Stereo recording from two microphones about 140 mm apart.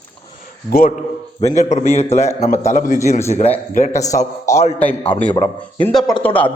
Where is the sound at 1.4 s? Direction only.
20° left (ahead or behind).